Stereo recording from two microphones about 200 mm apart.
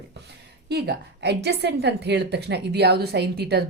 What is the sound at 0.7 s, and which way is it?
A woman's voice, 55° right (ahead or behind).